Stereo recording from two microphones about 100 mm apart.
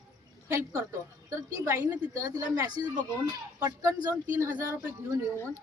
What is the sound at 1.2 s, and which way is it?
A woman's voice, 30° right (ahead or behind).